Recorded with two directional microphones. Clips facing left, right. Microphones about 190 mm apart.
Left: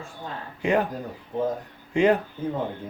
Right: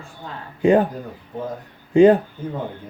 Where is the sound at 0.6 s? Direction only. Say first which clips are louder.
Right 7 dB; 30° right (ahead or behind).